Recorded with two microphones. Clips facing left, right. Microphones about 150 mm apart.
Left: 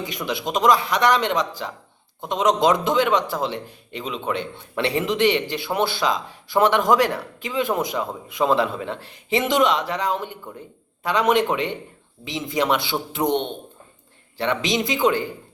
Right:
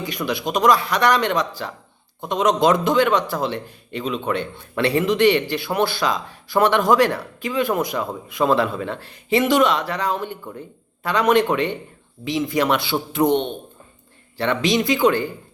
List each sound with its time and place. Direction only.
0.0 s a man's voice: 20° left (ahead or behind)